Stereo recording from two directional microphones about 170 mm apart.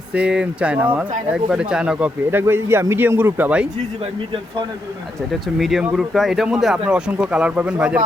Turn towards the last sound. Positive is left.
turn(degrees=-5)  # may be behind; listen again after turning